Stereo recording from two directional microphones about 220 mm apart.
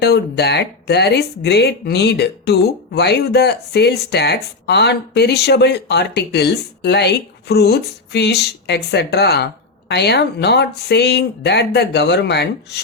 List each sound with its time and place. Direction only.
0.0 s speech: 50° left (ahead or behind)